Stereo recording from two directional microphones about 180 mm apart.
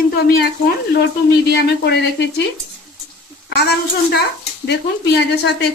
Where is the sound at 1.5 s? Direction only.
65° left (ahead or behind).